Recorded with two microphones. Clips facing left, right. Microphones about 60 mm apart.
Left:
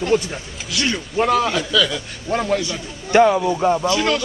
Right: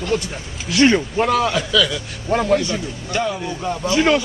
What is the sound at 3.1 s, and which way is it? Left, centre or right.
Speech, left.